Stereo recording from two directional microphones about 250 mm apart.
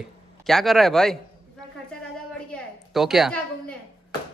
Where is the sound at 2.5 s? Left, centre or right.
Centre.